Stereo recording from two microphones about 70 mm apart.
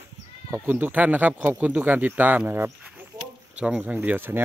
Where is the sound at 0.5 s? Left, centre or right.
Right.